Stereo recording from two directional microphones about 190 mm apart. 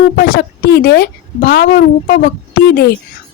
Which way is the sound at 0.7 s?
55° left (ahead or behind).